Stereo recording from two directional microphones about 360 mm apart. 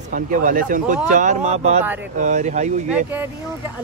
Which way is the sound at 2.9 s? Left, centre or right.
Centre.